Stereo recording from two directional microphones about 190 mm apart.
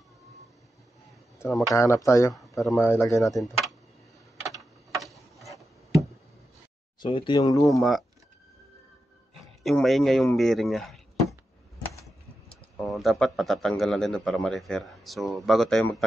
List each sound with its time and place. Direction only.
1.4 s speech: 15° left (ahead or behind)
5.0 s a sound: centre (ahead or behind)
7.0 s speech: 25° left (ahead or behind)
7.6 s speech: centre (ahead or behind)
9.6 s speech: centre (ahead or behind)
12.7 s speech: centre (ahead or behind)